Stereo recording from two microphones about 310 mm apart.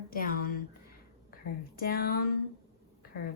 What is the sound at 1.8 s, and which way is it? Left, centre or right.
Speech, left.